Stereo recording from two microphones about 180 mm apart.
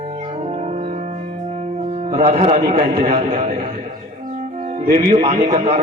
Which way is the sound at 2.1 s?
35° right (ahead or behind).